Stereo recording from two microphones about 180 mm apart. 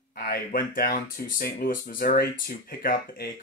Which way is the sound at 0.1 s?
55° left (ahead or behind).